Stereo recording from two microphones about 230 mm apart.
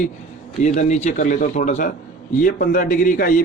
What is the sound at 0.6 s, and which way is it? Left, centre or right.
A man's voice, left.